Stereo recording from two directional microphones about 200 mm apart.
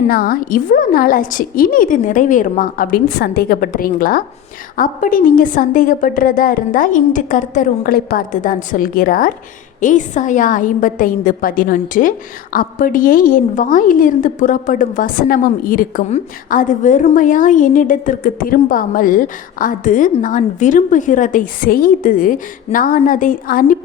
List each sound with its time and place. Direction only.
0.1 s a woman's voice: 45° left (ahead or behind)